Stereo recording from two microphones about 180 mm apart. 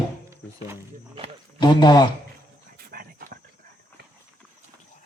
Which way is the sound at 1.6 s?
25° left (ahead or behind).